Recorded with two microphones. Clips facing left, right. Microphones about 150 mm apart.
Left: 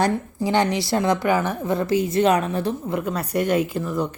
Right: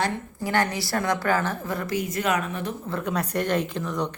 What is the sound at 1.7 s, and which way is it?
A woman's voice, 30° left (ahead or behind).